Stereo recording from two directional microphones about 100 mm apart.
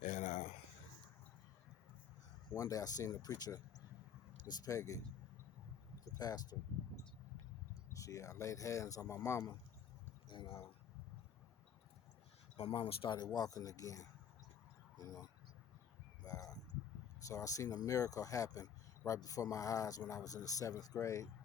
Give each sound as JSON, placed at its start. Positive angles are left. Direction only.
{"t": 2.6, "sound": "speech", "side_deg": 35}
{"t": 6.1, "sound": "speech", "side_deg": 40}
{"t": 7.9, "sound": "speech", "side_deg": 35}
{"t": 10.2, "sound": "speech", "side_deg": 55}
{"t": 12.5, "sound": "speech", "side_deg": 90}
{"t": 13.1, "sound": "speech", "side_deg": 45}
{"t": 16.2, "sound": "a sound", "side_deg": 40}
{"t": 17.2, "sound": "speech", "side_deg": 35}